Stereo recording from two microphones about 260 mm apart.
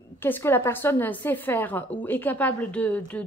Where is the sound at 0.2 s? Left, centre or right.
Centre.